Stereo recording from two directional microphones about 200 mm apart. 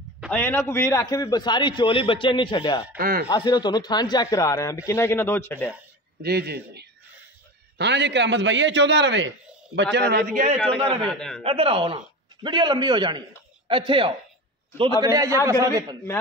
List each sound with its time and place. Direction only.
0.3 s a man's voice: 10° left (ahead or behind)
3.0 s a man's voice: 45° right (ahead or behind)
3.3 s speech: 20° left (ahead or behind)
6.2 s a man's voice: 55° right (ahead or behind)
11.1 s a man's voice: 5° left (ahead or behind)
11.4 s a man's voice: 25° right (ahead or behind)